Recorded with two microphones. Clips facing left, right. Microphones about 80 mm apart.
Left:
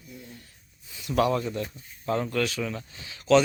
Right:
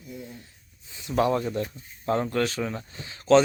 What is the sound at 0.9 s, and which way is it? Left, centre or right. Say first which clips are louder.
Speech: right 1 dB; right.